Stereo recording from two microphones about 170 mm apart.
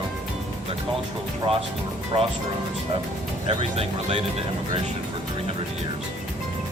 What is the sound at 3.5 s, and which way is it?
Speech, 35° right (ahead or behind).